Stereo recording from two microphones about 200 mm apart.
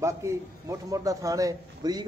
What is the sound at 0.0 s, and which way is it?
A man's voice, 15° right (ahead or behind).